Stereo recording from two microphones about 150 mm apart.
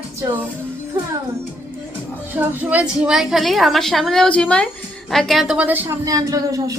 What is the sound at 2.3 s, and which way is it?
A woman's voice, 10° right (ahead or behind).